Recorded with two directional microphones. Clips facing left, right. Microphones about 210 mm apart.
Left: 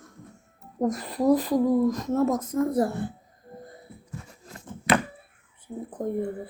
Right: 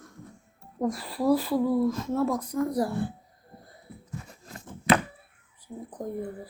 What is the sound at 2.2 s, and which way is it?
Speech, 20° left (ahead or behind).